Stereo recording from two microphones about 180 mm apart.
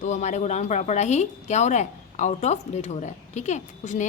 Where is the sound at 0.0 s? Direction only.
40° left (ahead or behind).